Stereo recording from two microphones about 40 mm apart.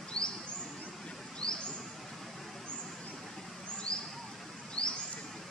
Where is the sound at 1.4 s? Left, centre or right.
Left.